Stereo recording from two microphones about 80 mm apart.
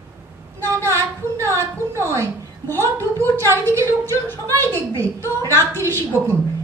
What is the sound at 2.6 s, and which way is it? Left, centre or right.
Speech, left.